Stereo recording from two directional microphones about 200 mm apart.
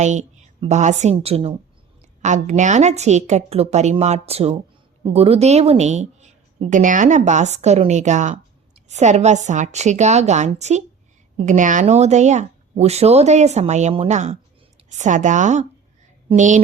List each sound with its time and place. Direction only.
0.0 s a woman's voice: 35° right (ahead or behind)